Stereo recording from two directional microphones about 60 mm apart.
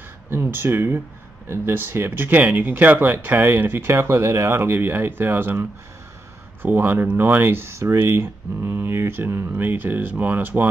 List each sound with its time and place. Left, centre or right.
0.3 s speech: right
7.8 s speech: right